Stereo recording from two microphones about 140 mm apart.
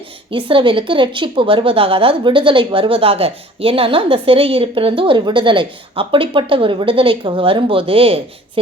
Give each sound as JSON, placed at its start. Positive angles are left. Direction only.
{"t": 0.3, "sound": "speech", "side_deg": -40}